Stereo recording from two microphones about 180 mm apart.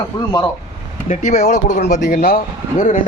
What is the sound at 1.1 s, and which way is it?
Speech, 45° left (ahead or behind).